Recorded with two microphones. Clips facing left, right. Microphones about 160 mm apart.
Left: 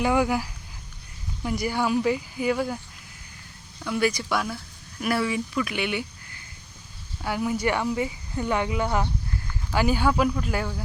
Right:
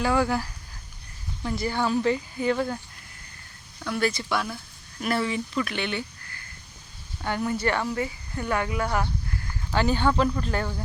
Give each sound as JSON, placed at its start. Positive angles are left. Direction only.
{"t": 0.0, "sound": "speech", "side_deg": 15}
{"t": 7.2, "sound": "speech", "side_deg": 5}